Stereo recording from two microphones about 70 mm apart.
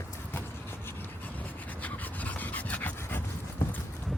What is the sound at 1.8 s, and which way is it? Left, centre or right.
Dog, left.